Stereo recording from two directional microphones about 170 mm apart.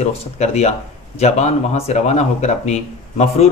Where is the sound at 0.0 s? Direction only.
40° left (ahead or behind).